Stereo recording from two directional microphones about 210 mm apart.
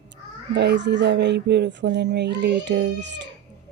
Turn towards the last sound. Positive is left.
turn(degrees=-55)  # may be behind; listen again after turning